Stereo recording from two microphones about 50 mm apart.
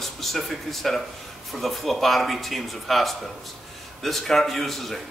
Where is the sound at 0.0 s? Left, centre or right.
Centre.